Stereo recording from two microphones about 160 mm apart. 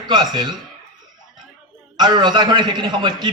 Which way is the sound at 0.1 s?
25° right (ahead or behind).